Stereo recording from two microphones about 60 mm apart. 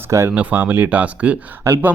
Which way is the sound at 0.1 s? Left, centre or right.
Right.